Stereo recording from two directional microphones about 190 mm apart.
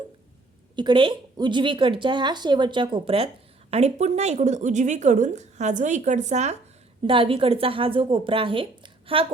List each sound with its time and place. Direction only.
0.8 s a woman's voice: 25° right (ahead or behind)